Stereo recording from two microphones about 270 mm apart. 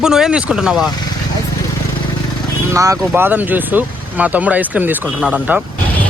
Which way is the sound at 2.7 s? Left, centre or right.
Centre.